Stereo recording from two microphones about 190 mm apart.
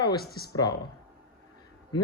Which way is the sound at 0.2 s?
55° left (ahead or behind).